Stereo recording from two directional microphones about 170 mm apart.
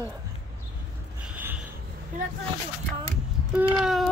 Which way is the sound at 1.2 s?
10° right (ahead or behind).